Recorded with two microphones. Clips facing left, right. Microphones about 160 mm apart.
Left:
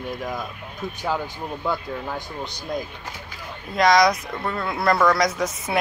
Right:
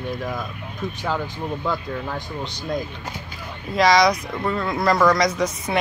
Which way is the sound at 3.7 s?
Centre (ahead or behind).